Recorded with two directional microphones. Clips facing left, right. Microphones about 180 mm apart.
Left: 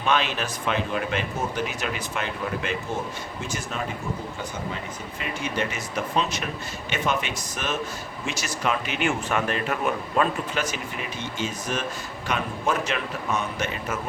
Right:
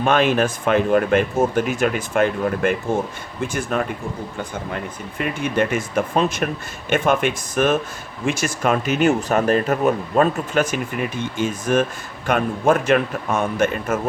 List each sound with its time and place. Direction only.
0.0 s speech: 50° right (ahead or behind)